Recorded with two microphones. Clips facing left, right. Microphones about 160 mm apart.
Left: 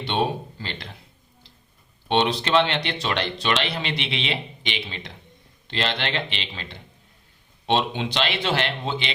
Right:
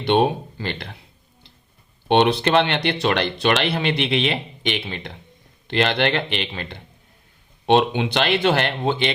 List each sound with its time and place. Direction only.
0.6 s speech: 55° right (ahead or behind)
2.0 s speech: 60° right (ahead or behind)